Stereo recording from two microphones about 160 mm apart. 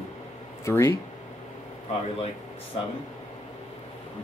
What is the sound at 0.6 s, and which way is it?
Speech, 15° left (ahead or behind).